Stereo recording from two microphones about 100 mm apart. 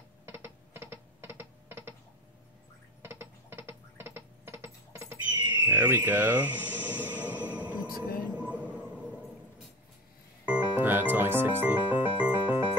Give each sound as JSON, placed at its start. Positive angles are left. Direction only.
{"t": 0.3, "sound": "music", "side_deg": -25}
{"t": 3.0, "sound": "music", "side_deg": -25}
{"t": 8.4, "sound": "a sound", "side_deg": -15}
{"t": 10.4, "sound": "music", "side_deg": -15}